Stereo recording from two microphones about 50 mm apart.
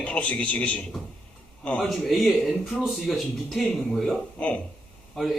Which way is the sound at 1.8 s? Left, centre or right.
Centre.